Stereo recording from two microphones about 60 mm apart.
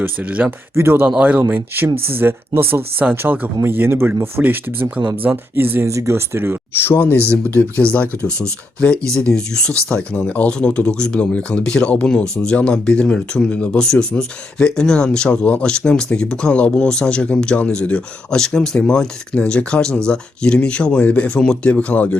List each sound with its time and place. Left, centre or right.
0.0 s speech: right
0.8 s speech: right
5.9 s speech: right
6.7 s speech: left
8.3 s speech: right
8.8 s speech: centre